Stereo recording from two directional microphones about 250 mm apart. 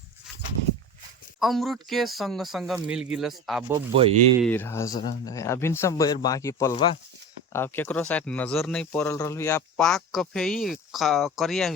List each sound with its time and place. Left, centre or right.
1.4 s speech: centre
3.8 s speech: right
4.4 s speech: centre